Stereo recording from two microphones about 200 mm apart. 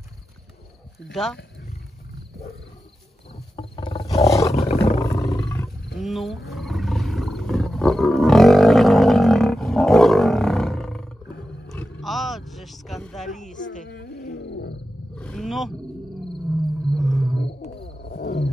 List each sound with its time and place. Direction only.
1.1 s speech: centre (ahead or behind)
3.3 s wild animals: 25° left (ahead or behind)
4.1 s roar: 15° left (ahead or behind)
4.6 s roar: 30° left (ahead or behind)
5.1 s roar: 15° left (ahead or behind)
5.9 s roar: centre (ahead or behind)
11.7 s roaring cats: centre (ahead or behind)
13.8 s wild animals: 50° left (ahead or behind)
15.1 s roaring cats: 5° left (ahead or behind)
16.9 s wild animals: centre (ahead or behind)
17.7 s wild animals: 55° left (ahead or behind)